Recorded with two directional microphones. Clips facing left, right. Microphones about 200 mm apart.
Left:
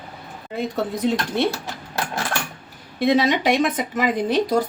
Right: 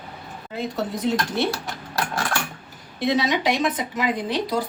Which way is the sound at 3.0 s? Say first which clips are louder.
Left 3 dB; 55° left (ahead or behind).